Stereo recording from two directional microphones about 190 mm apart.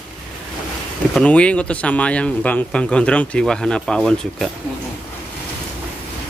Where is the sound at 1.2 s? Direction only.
5° left (ahead or behind).